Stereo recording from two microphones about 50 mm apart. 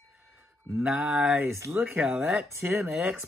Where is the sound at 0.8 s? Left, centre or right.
Right.